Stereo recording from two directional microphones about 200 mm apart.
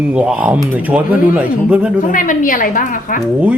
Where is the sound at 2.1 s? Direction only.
40° left (ahead or behind).